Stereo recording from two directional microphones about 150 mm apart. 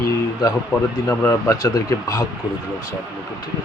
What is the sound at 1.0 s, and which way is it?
Speech, 20° left (ahead or behind).